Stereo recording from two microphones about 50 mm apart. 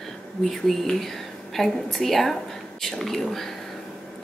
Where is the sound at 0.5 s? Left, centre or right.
Centre.